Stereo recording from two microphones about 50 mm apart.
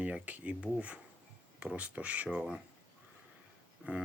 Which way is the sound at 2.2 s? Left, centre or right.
Centre.